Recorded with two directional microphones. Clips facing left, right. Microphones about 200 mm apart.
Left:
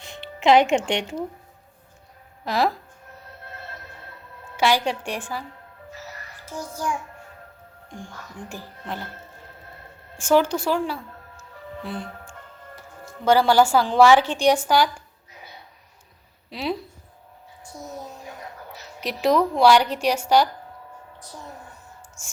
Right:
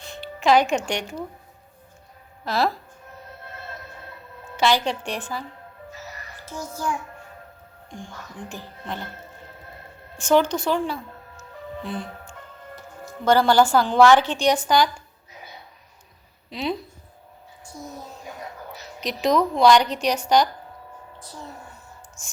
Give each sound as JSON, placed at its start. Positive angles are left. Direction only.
{"t": 0.0, "sound": "speech", "side_deg": 20}
{"t": 2.4, "sound": "speech", "side_deg": 15}
{"t": 4.5, "sound": "a woman's voice", "side_deg": 10}
{"t": 6.4, "sound": "music", "side_deg": 10}
{"t": 8.4, "sound": "a woman's voice", "side_deg": 10}
{"t": 10.2, "sound": "a woman's voice", "side_deg": 10}
{"t": 16.5, "sound": "a woman's voice", "side_deg": 5}
{"t": 18.9, "sound": "a woman's voice", "side_deg": 10}